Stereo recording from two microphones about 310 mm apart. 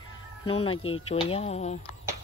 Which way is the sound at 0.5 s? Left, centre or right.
Centre.